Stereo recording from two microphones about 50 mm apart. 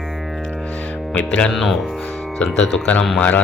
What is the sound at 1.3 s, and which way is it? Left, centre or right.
Speech, left.